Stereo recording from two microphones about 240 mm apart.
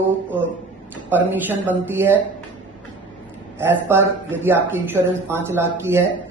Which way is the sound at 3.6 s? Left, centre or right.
Centre.